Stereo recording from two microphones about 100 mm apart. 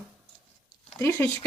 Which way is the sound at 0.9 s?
25° left (ahead or behind).